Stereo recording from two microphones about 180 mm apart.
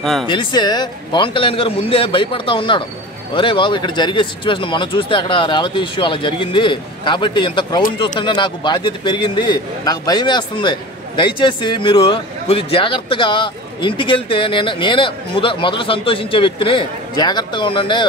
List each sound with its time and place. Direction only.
0.0 s speech: centre (ahead or behind)
0.3 s a man's voice: 25° left (ahead or behind)